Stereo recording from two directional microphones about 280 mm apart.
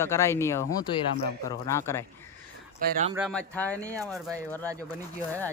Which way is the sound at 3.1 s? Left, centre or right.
Centre.